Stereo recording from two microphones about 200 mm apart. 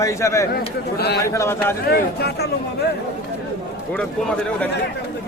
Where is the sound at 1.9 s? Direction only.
50° left (ahead or behind).